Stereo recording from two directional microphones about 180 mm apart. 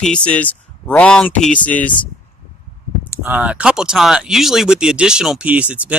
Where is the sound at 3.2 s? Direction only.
5° right (ahead or behind).